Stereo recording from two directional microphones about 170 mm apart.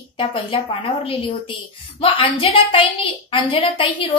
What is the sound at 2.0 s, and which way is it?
Speech, 30° left (ahead or behind).